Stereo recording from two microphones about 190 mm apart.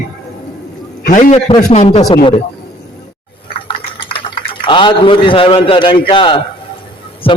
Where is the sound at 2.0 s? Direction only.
25° left (ahead or behind).